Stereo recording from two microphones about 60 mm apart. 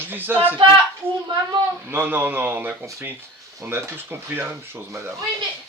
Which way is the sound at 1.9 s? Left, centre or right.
Right.